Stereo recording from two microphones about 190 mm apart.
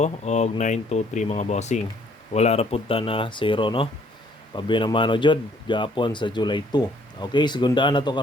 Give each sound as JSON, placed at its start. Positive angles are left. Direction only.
{"t": 0.0, "sound": "speech", "side_deg": 35}